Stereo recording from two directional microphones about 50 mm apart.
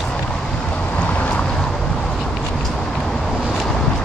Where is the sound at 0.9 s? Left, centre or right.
Left.